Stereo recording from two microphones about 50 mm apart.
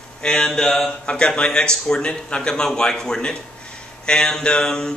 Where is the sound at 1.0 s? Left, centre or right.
Centre.